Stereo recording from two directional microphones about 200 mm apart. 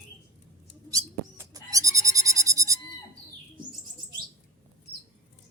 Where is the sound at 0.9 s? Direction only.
15° right (ahead or behind).